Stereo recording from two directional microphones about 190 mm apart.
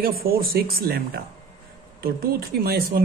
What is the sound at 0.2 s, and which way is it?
Speech, 50° right (ahead or behind).